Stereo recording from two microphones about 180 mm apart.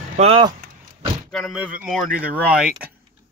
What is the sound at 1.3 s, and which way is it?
Speech, centre (ahead or behind).